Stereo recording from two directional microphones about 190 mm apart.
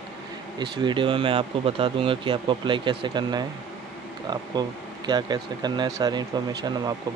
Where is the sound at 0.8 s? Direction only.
25° right (ahead or behind).